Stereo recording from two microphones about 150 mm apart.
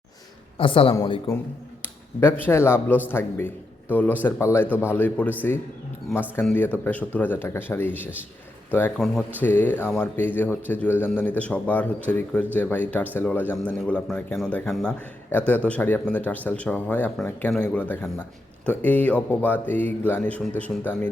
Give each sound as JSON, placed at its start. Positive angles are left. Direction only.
{"t": 0.5, "sound": "speech", "side_deg": 35}
{"t": 1.8, "sound": "a man's voice", "side_deg": 15}
{"t": 6.4, "sound": "a man's voice", "side_deg": 10}